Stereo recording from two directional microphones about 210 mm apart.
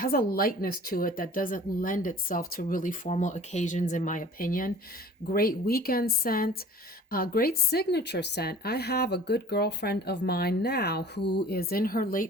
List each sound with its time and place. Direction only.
0.0 s a woman's voice: 45° left (ahead or behind)